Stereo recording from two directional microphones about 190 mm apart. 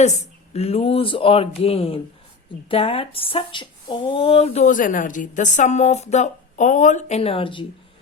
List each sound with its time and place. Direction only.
0.0 s speech: 35° left (ahead or behind)